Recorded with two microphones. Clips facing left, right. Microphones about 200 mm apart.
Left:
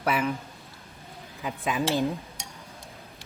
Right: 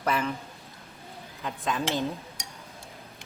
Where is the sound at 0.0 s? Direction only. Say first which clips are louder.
Left 2 dB; 10° left (ahead or behind).